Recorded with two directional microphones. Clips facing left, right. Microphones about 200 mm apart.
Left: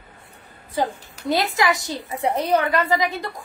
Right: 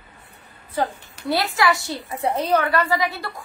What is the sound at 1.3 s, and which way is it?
A woman's voice, 20° left (ahead or behind).